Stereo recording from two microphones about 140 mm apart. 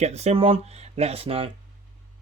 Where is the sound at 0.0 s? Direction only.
50° right (ahead or behind).